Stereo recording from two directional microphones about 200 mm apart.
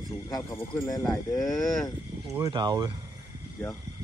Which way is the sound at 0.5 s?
10° left (ahead or behind).